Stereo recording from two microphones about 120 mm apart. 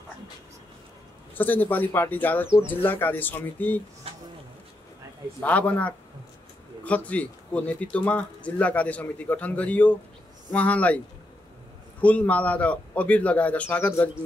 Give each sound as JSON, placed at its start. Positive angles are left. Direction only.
{"t": 1.3, "sound": "speech", "side_deg": 15}
{"t": 4.1, "sound": "insect", "side_deg": -55}
{"t": 5.4, "sound": "speech", "side_deg": 10}
{"t": 7.1, "sound": "speech", "side_deg": 10}
{"t": 12.0, "sound": "speech", "side_deg": 10}